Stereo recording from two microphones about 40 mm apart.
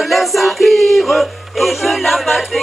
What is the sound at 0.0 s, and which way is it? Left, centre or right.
Music, centre.